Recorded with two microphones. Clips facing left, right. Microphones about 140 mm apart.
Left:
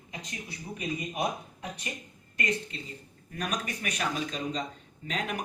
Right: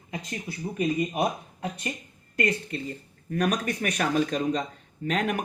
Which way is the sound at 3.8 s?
55° right (ahead or behind).